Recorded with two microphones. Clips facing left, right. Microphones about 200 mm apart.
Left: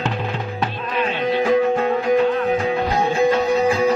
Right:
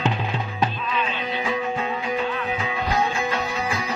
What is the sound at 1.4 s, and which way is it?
Music, 60° left (ahead or behind).